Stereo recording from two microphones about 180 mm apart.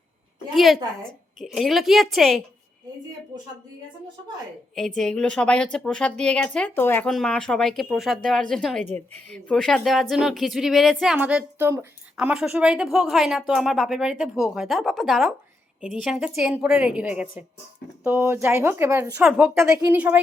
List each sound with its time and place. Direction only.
0.5 s speech: centre (ahead or behind)
4.9 s speech: 5° left (ahead or behind)